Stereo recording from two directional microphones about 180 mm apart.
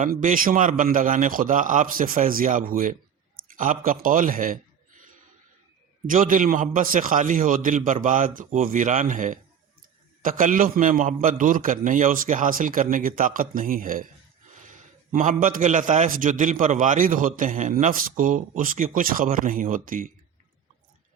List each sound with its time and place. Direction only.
0.0 s a man's voice: 45° right (ahead or behind)
6.1 s a man's voice: 50° right (ahead or behind)